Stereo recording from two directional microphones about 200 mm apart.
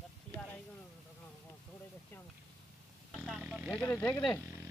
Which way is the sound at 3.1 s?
5° right (ahead or behind).